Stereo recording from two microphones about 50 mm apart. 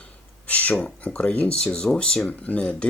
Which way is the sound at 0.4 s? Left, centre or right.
Left.